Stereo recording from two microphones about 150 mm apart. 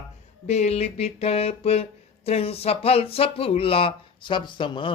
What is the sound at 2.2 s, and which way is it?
Speech, 40° left (ahead or behind).